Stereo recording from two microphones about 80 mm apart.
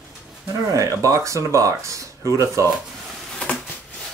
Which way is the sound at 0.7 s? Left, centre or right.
Right.